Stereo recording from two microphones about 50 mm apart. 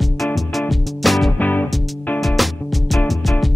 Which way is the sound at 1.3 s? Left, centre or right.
Left.